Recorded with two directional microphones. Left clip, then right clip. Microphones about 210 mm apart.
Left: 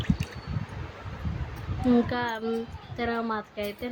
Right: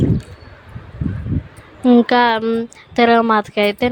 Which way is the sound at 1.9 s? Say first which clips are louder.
Right 14 dB; 45° right (ahead or behind).